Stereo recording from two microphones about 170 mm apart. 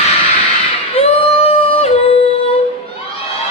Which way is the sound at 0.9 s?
35° left (ahead or behind).